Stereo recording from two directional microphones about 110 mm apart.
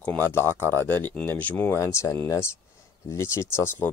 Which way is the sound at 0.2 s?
25° left (ahead or behind).